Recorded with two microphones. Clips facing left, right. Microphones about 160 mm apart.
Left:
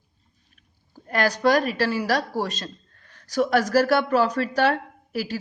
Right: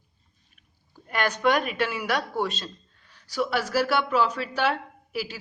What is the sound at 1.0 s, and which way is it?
Speech, 35° left (ahead or behind).